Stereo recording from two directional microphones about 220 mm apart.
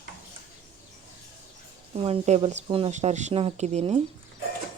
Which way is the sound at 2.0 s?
25° right (ahead or behind).